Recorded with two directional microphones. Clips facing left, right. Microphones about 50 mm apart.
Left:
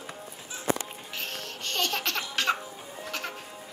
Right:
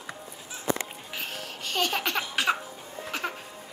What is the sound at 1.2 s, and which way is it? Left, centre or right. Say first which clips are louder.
Laughter: right 1 dB; centre.